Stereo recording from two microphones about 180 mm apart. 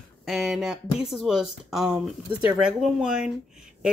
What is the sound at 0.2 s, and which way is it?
Speech, centre (ahead or behind).